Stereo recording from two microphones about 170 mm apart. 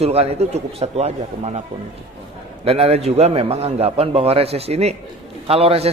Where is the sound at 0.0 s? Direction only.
35° right (ahead or behind).